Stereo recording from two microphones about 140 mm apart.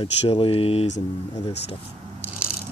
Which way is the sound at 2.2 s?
10° right (ahead or behind).